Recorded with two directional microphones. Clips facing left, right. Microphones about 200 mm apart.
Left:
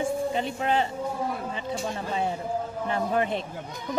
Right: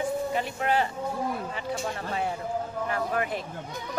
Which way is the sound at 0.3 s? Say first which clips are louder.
Left 1 dB; 25° left (ahead or behind).